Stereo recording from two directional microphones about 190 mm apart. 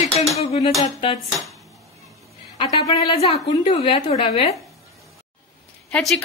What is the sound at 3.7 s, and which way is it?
Speech, 35° left (ahead or behind).